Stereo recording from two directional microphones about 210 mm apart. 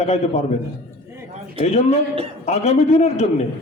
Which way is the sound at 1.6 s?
30° left (ahead or behind).